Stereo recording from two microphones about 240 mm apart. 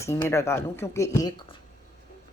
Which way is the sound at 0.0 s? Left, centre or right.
Centre.